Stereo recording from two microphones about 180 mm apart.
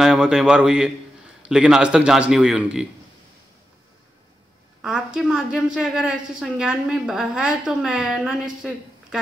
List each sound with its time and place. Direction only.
0.0 s a woman's voice: 5° right (ahead or behind)
4.8 s a woman's voice: 5° right (ahead or behind)